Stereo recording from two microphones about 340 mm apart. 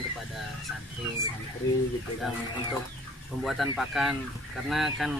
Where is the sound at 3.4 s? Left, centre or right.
Centre.